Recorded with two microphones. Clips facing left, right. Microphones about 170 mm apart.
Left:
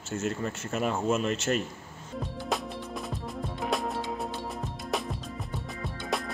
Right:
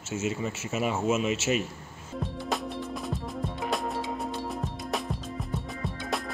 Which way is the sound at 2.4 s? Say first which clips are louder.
Even; centre (ahead or behind).